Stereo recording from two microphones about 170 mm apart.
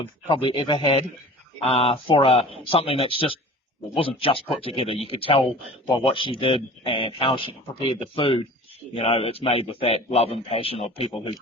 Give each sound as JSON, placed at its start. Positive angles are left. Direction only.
{"t": 0.3, "sound": "speech", "side_deg": 30}